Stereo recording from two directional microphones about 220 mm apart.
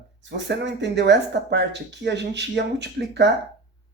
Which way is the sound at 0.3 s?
55° right (ahead or behind).